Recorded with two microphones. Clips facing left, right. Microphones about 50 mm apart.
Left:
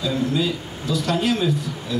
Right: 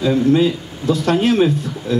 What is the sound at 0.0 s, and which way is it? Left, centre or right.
A man's voice, right.